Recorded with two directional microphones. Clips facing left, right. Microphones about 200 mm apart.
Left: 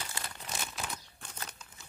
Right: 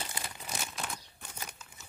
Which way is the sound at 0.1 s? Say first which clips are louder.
Right 1 dB; 10° right (ahead or behind).